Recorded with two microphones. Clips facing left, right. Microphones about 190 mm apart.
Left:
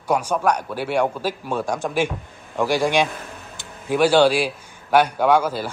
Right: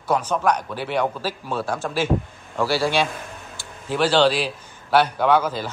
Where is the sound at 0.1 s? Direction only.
10° left (ahead or behind).